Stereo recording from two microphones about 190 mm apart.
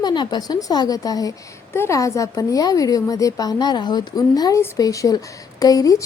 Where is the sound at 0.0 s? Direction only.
25° left (ahead or behind).